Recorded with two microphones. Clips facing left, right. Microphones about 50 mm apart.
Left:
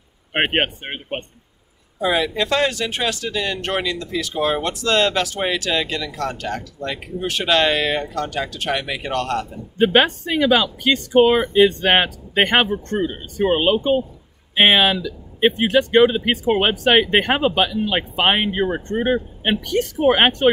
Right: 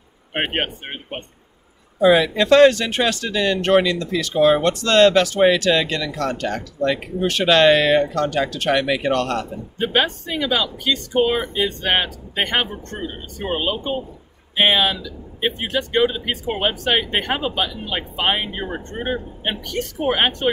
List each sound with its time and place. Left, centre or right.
0.3 s speech: left
2.0 s speech: centre
9.8 s speech: left